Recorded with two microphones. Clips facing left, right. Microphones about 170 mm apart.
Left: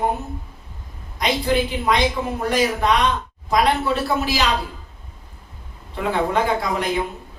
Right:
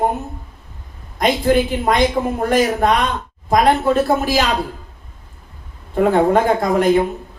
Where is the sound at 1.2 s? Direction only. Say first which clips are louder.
Right 5 dB; 50° right (ahead or behind).